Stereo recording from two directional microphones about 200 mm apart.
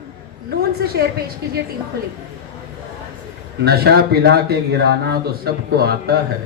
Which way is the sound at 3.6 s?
55° right (ahead or behind).